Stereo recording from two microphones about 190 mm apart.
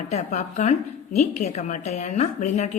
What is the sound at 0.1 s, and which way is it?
A woman's voice, 35° left (ahead or behind).